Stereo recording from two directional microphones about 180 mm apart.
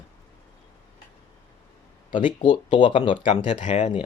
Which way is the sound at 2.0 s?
45° left (ahead or behind).